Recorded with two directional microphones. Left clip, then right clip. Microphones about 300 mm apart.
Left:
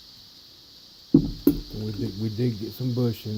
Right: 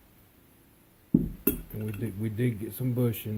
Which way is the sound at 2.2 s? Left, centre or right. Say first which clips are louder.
Left 2 dB; left.